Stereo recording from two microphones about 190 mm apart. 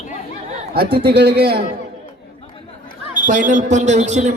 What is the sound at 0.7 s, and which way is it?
Speech, 55° right (ahead or behind).